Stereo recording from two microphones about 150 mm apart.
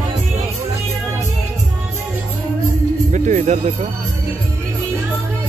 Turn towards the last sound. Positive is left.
turn(degrees=-45)  # may be behind; listen again after turning